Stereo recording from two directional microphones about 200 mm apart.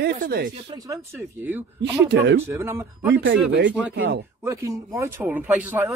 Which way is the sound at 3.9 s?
60° right (ahead or behind).